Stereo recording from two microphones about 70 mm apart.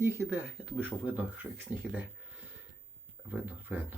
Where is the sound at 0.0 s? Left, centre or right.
Right.